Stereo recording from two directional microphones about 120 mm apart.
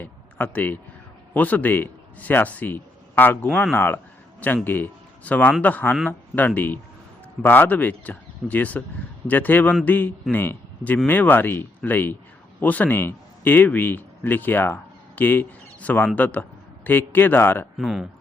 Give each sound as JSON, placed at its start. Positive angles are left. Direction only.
{"t": 0.0, "sound": "a sound", "side_deg": 15}
{"t": 1.3, "sound": "a man's voice", "side_deg": 15}
{"t": 17.7, "sound": "speech", "side_deg": 0}